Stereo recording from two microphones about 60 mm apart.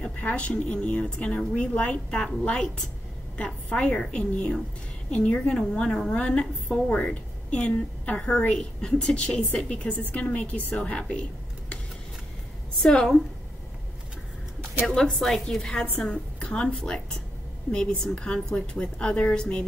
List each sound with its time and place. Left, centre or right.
0.0 s a woman's voice: left
12.8 s a woman's voice: centre
15.0 s a woman's voice: centre
15.8 s a woman's voice: left